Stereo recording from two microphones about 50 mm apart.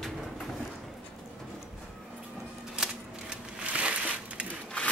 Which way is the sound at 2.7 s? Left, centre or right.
Centre.